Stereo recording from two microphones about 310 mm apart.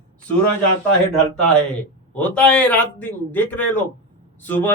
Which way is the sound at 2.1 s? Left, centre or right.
Centre.